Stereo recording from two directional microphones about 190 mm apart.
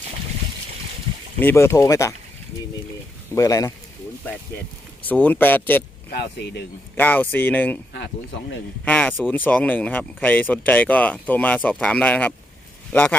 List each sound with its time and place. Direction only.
1.4 s speech: 10° left (ahead or behind)
3.3 s speech: 20° left (ahead or behind)
5.0 s speech: 10° left (ahead or behind)
6.1 s speech: 60° left (ahead or behind)
6.9 s speech: 10° left (ahead or behind)
7.9 s speech: 65° left (ahead or behind)
8.8 s speech: 10° left (ahead or behind)